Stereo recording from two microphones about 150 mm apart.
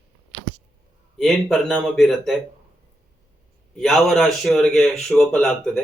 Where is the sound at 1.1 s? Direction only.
5° left (ahead or behind).